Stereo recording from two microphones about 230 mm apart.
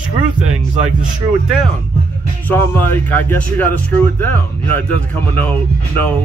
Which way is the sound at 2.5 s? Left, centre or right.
Centre.